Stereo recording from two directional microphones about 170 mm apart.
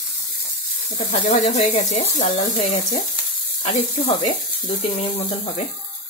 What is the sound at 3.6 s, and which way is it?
Speech, 35° left (ahead or behind).